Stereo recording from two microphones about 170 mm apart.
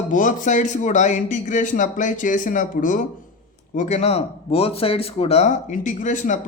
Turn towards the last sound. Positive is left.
turn(degrees=50)  # may be behind; listen again after turning